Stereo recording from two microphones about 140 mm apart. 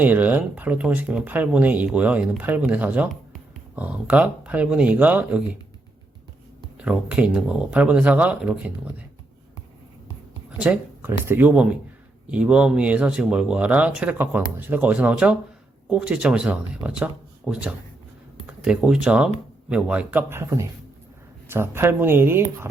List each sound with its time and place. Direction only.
0.0 s speech: 10° right (ahead or behind)
6.8 s speech: 5° right (ahead or behind)
10.6 s speech: 10° right (ahead or behind)